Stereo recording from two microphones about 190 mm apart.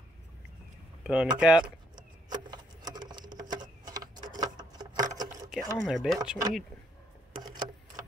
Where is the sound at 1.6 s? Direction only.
20° right (ahead or behind).